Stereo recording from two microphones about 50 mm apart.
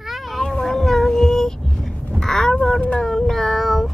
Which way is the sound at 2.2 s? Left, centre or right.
Centre.